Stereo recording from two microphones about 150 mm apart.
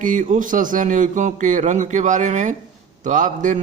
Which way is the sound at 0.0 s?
60° right (ahead or behind).